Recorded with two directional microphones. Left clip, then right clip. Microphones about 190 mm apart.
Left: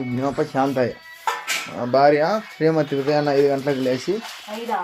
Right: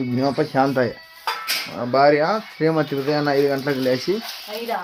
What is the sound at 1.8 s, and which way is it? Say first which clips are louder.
Speech: even; 5° right (ahead or behind).